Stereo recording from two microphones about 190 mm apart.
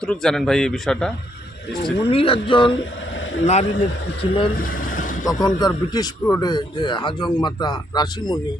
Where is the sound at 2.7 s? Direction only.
75° left (ahead or behind).